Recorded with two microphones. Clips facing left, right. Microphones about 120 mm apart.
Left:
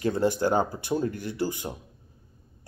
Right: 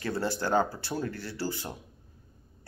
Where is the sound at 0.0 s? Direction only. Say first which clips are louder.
Left 7 dB; 20° left (ahead or behind).